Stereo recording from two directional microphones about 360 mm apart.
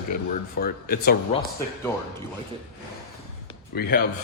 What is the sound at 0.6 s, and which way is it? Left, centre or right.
Speech, left.